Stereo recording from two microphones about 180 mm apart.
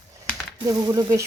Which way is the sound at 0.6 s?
20° right (ahead or behind).